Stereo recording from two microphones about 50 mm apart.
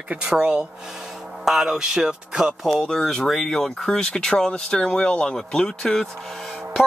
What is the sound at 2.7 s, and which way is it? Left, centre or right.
Speech, centre.